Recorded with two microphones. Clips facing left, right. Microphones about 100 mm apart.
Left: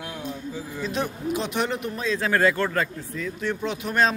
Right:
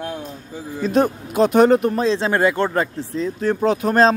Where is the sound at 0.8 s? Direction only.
45° right (ahead or behind); by 2.8 s 25° right (ahead or behind).